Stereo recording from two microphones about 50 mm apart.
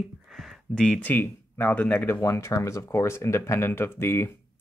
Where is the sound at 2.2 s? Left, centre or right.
Left.